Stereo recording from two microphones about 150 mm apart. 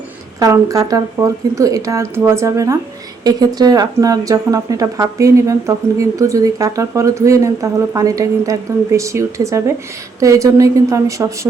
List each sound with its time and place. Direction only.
0.3 s a woman's voice: 20° right (ahead or behind)